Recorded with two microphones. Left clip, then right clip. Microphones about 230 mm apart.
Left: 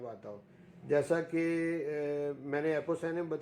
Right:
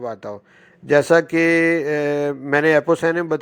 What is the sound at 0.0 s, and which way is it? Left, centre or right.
A man's voice, right.